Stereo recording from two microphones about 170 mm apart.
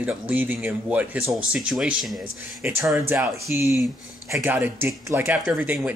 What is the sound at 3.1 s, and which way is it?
Speech, 10° right (ahead or behind).